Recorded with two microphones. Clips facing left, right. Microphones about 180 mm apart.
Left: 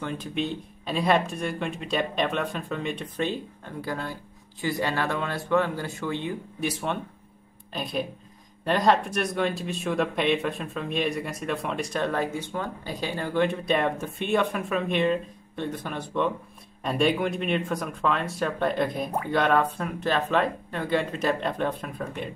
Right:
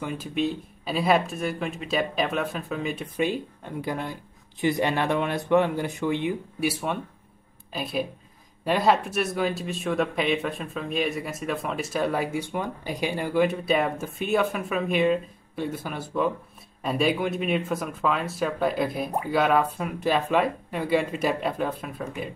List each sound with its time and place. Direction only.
0.0 s speech: 5° right (ahead or behind)